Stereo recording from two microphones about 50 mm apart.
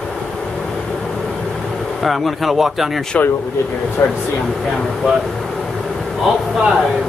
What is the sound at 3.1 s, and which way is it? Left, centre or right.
Speech, left.